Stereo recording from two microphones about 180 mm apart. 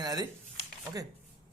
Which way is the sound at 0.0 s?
20° right (ahead or behind).